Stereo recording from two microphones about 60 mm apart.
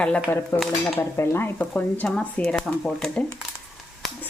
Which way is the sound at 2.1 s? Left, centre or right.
Centre.